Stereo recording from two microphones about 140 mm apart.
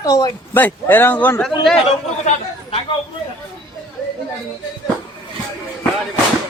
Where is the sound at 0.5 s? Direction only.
15° left (ahead or behind).